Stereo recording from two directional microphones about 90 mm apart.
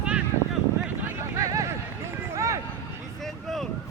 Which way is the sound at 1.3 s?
40° right (ahead or behind).